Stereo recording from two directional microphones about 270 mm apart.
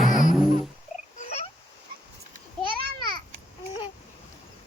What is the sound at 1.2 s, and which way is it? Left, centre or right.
Frog, left.